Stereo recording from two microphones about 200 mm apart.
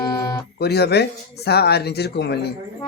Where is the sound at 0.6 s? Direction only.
55° left (ahead or behind).